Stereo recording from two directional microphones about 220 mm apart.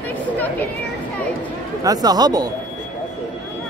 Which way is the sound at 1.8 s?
15° right (ahead or behind).